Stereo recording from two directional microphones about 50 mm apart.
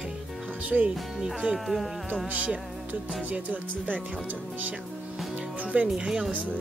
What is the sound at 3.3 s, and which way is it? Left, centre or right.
Speech, right.